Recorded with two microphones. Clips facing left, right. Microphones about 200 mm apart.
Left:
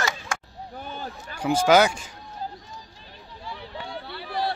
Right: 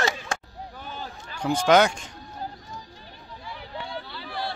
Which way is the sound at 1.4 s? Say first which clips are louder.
Left 1 dB; 5° left (ahead or behind).